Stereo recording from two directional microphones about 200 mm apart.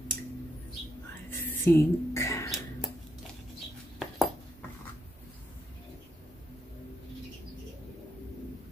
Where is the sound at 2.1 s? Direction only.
15° left (ahead or behind).